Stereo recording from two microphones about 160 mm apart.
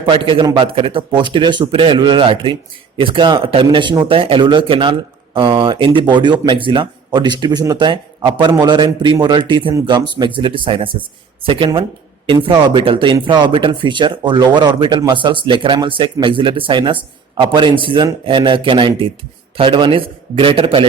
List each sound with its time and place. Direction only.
0.0 s speech: 30° right (ahead or behind)